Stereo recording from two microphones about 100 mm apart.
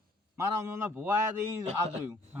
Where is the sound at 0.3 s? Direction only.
25° right (ahead or behind).